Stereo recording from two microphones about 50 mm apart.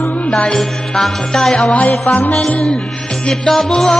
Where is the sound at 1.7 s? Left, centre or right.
Left.